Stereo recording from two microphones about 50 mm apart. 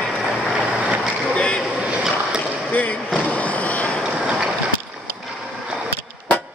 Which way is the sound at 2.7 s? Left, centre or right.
Left.